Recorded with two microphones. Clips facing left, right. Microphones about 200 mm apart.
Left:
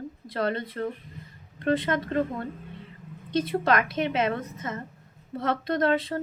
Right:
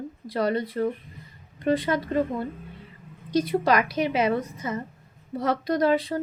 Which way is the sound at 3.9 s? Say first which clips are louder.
Right 3 dB; 5° right (ahead or behind).